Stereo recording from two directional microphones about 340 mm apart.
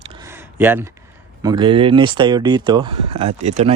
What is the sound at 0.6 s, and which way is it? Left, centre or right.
Speech, centre.